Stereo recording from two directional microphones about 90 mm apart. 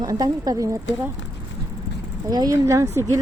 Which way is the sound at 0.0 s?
45° right (ahead or behind).